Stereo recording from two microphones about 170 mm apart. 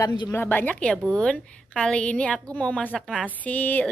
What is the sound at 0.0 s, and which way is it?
Speech, 25° left (ahead or behind).